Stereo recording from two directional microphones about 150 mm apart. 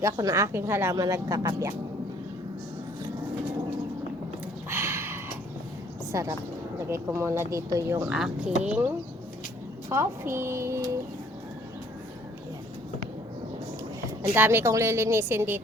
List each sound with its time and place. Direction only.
0.0 s a woman's voice: 20° right (ahead or behind)
4.7 s a sound: 15° right (ahead or behind)
6.1 s a woman's voice: 20° right (ahead or behind)
8.1 s speech: 5° right (ahead or behind)
9.9 s speech: 20° right (ahead or behind)
14.3 s speech: 15° right (ahead or behind)